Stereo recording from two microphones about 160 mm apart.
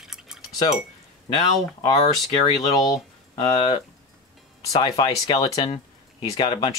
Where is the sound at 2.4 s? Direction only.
25° left (ahead or behind).